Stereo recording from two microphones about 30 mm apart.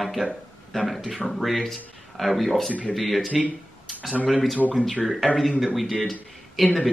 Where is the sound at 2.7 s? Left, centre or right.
Left.